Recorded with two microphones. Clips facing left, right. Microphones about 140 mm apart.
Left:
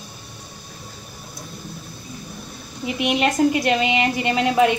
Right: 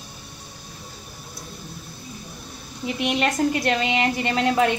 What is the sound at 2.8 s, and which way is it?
A woman's voice, 10° left (ahead or behind).